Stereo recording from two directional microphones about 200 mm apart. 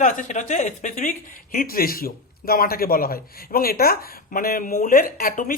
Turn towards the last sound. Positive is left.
turn(degrees=45)  # may be behind; listen again after turning